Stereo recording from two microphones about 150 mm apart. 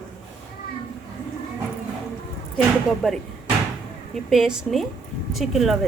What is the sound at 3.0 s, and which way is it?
Speech, 5° right (ahead or behind).